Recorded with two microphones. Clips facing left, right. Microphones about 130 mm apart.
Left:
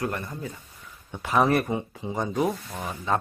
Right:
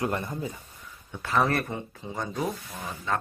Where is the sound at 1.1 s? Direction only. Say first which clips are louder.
Left 3 dB; 15° left (ahead or behind).